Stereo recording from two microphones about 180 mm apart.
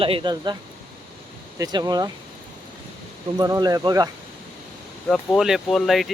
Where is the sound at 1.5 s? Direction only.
20° right (ahead or behind).